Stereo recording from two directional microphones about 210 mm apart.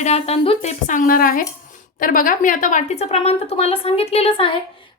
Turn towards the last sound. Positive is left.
turn(degrees=25)  # may be behind; listen again after turning